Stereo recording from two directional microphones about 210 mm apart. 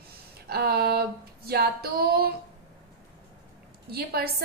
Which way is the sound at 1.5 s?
50° right (ahead or behind).